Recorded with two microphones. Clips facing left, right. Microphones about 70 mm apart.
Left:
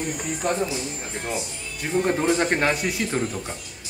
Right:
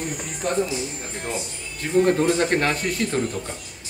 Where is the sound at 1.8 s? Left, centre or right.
Centre.